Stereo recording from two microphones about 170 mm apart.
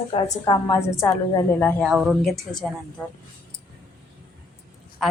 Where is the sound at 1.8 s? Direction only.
Centre (ahead or behind).